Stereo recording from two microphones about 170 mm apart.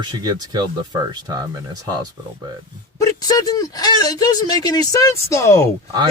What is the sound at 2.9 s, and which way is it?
Speech, 20° left (ahead or behind).